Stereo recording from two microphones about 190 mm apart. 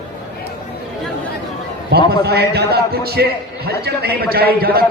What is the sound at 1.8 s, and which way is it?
A man's voice, 55° right (ahead or behind).